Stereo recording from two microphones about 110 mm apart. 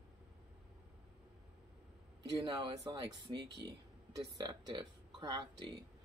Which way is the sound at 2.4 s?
45° right (ahead or behind).